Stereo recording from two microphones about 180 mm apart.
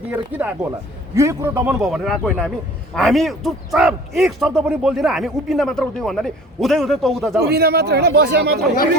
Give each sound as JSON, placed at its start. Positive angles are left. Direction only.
{"t": 0.1, "sound": "a man's voice", "side_deg": -10}
{"t": 7.4, "sound": "speech", "side_deg": -60}